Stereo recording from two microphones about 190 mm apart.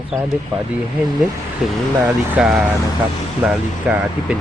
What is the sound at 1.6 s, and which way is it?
Speech, 5° right (ahead or behind).